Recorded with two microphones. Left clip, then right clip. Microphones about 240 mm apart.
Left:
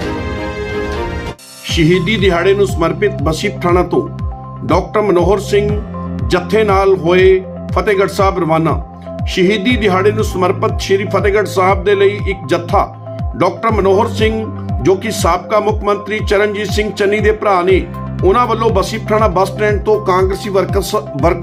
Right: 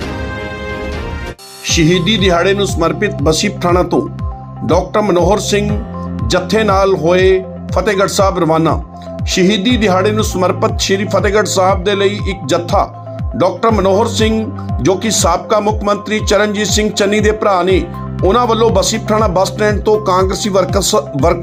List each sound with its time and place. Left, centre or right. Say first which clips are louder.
1.6 s speech: right 1 dB; centre